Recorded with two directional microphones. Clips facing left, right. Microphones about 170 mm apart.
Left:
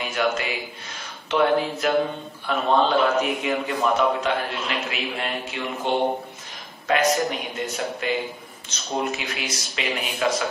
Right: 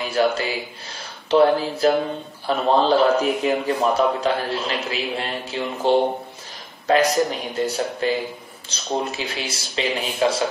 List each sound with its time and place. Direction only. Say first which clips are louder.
0.0 s a man's voice: right 4 dB; 35° right (ahead or behind)